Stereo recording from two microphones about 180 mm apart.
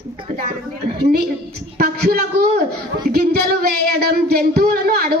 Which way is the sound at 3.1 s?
60° right (ahead or behind).